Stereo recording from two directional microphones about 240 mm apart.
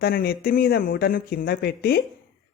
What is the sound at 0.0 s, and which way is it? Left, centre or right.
Speech, left.